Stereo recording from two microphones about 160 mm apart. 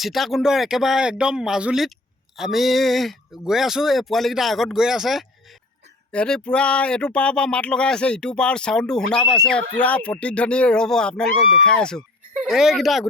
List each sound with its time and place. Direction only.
0.0 s speech: centre (ahead or behind)